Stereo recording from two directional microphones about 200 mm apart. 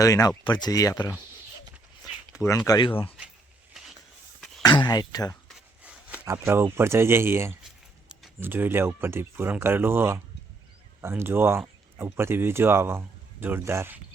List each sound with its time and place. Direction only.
0.0 s speech: 15° left (ahead or behind)
2.3 s speech: 15° left (ahead or behind)
4.4 s a sound: centre (ahead or behind)
4.6 s speech: 20° left (ahead or behind)
5.5 s a sound: 5° right (ahead or behind)
8.4 s speech: 10° right (ahead or behind)